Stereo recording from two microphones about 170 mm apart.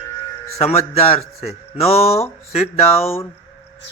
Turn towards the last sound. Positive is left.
turn(degrees=35)  # may be behind; listen again after turning